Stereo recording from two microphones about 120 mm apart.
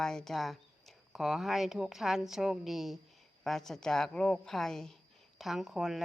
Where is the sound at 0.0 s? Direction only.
5° left (ahead or behind).